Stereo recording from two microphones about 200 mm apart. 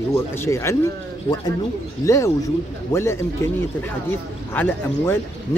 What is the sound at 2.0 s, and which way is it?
Speech, 15° left (ahead or behind).